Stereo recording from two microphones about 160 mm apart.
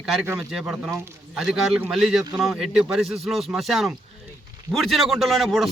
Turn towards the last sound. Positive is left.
turn(degrees=0)  # may be behind; listen again after turning